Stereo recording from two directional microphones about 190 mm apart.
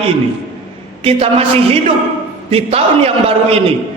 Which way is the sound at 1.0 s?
30° right (ahead or behind).